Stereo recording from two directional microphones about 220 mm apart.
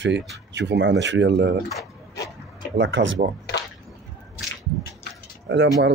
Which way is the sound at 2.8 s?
55° right (ahead or behind).